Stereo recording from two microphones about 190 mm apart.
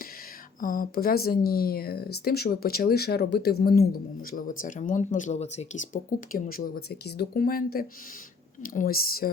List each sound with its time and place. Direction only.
0.6 s speech: 45° left (ahead or behind)